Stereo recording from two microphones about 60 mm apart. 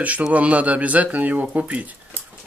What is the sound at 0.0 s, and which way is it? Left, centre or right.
Speech, right.